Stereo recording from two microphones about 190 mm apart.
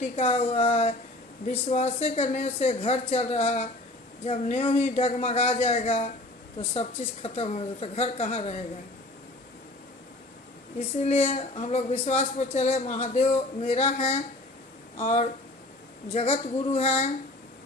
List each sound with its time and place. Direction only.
0.2 s speech: 30° left (ahead or behind)
10.8 s speech: 35° left (ahead or behind)